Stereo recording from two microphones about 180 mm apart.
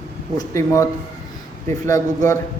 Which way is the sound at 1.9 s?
15° left (ahead or behind).